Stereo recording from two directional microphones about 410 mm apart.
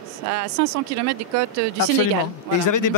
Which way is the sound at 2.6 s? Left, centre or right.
Left.